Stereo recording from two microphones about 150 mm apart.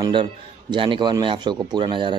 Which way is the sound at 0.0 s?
30° right (ahead or behind).